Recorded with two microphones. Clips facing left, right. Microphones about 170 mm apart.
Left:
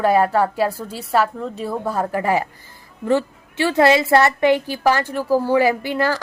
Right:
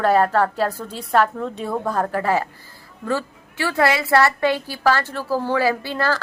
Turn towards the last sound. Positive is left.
turn(degrees=15)  # may be behind; listen again after turning